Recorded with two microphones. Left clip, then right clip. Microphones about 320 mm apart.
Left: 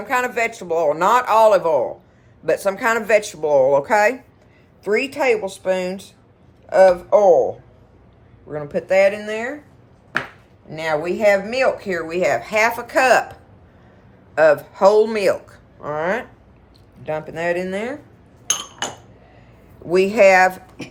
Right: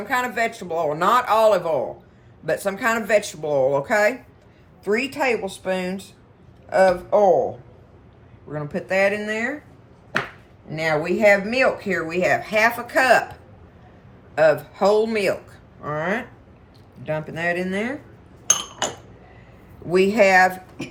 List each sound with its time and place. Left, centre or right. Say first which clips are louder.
0.1 s speech: left 3 dB; centre
8.5 s speech: left 5 dB; centre
10.7 s speech: even; centre
14.3 s speech: left 3 dB; centre
18.8 s a sound: right 1 dB; centre
19.9 s speech: left 3 dB; centre